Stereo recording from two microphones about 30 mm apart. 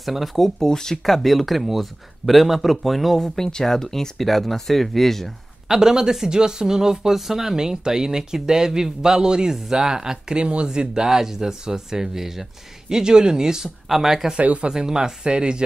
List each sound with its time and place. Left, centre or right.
0.0 s speech: centre
0.7 s speech: centre
1.0 s speech: centre
3.2 s speech: centre
4.2 s speech: centre
5.7 s speech: centre
7.5 s speech: right
10.3 s speech: right; by 12.4 s centre
12.9 s speech: right
13.8 s speech: centre
14.4 s speech: right
14.7 s speech: right